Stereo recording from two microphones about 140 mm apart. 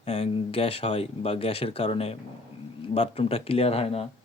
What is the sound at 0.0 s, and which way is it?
A man's voice, 45° left (ahead or behind).